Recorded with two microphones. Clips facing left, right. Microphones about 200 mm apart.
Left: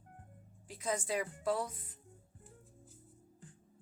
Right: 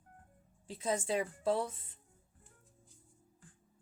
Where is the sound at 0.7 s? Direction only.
25° right (ahead or behind).